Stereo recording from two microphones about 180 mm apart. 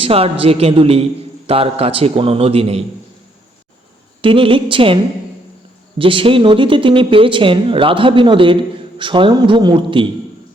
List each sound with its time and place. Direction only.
0.0 s a man's voice: 30° right (ahead or behind)
4.2 s speech: 30° right (ahead or behind)
6.0 s speech: 30° right (ahead or behind)